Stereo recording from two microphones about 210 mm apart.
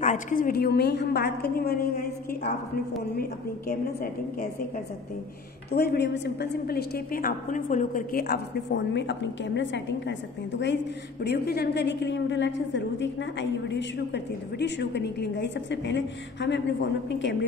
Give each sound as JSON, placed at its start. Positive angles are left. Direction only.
{"t": 0.0, "sound": "a woman's voice", "side_deg": 40}
{"t": 5.7, "sound": "a woman's voice", "side_deg": 50}
{"t": 11.2, "sound": "a woman's voice", "side_deg": 50}